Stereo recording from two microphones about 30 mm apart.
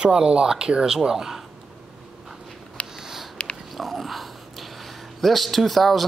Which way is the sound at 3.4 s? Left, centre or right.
Left.